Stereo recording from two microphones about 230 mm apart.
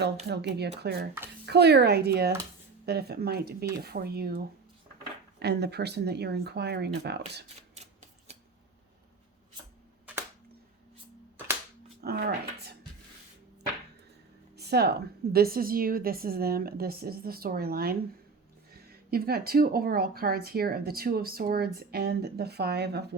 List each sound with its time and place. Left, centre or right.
0.3 s speech: right
7.8 s a sound: right
12.0 s speech: right
14.5 s speech: right